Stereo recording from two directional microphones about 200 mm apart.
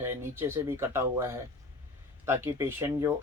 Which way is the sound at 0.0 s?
10° right (ahead or behind).